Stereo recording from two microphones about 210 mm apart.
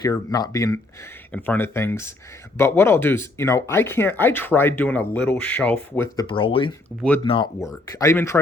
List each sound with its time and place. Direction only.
0.0 s speech: 15° left (ahead or behind)
6.2 s speech: 25° left (ahead or behind)